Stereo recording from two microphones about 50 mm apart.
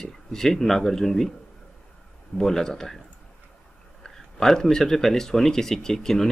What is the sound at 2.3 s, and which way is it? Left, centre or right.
Speech, centre.